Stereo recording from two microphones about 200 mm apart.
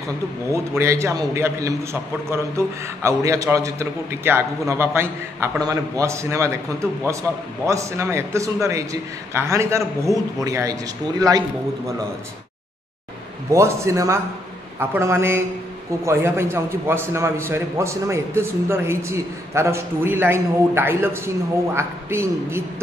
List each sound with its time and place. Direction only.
0.5 s a man's voice: 15° right (ahead or behind)
13.5 s a man's voice: 15° right (ahead or behind)